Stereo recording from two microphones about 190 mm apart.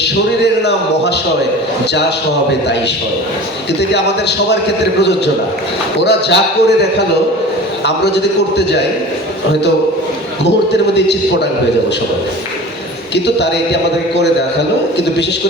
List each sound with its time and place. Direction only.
0.0 s a man's voice: 60° left (ahead or behind)
3.8 s a man's voice: 60° left (ahead or behind)
6.0 s a man's voice: 65° left (ahead or behind)
7.9 s a man's voice: 65° left (ahead or behind)
13.1 s a man's voice: 65° left (ahead or behind)